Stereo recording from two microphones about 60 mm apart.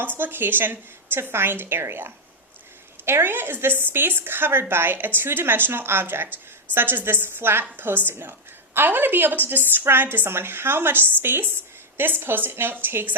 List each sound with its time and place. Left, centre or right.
0.0 s a woman's voice: right